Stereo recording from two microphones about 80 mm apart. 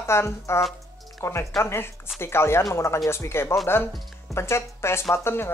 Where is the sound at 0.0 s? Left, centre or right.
Left.